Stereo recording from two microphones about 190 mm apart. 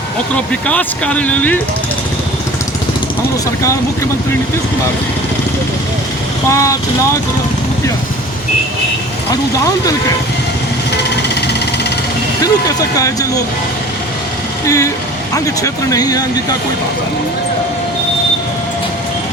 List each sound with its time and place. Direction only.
0.7 s speech: 5° left (ahead or behind)
3.6 s speech: 15° left (ahead or behind)
6.5 s speech: 15° left (ahead or behind)
12.4 s speech: 20° left (ahead or behind)
14.6 s speech: 15° left (ahead or behind)